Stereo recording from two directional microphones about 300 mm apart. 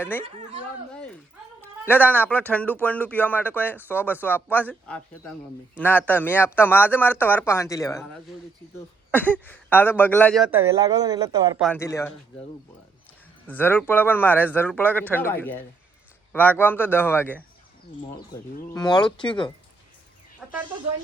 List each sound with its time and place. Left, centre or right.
0.0 s speech: centre
1.8 s speech: centre
11.6 s speech: centre
13.5 s speech: centre
18.7 s speech: centre
20.4 s a sound: centre